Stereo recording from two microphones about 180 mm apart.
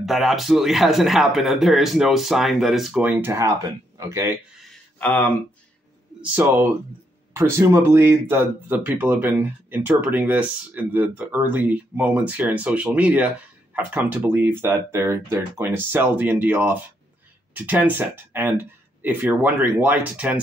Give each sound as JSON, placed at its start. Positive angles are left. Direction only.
{"t": 0.0, "sound": "a man's voice", "side_deg": 0}
{"t": 4.9, "sound": "speech", "side_deg": 10}
{"t": 6.2, "sound": "speech", "side_deg": -10}